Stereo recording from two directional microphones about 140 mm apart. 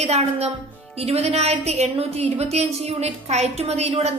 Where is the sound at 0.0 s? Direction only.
50° right (ahead or behind).